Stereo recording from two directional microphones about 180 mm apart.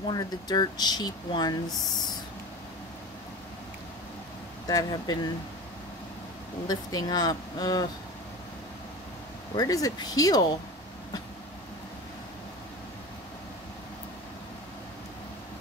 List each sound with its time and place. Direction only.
0.1 s speech: 20° left (ahead or behind)
4.6 s speech: 20° left (ahead or behind)
6.7 s speech: 20° left (ahead or behind)
9.6 s speech: 20° left (ahead or behind)